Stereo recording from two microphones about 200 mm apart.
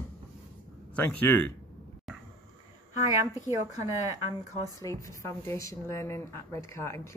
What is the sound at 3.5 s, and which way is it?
Speech, 15° right (ahead or behind).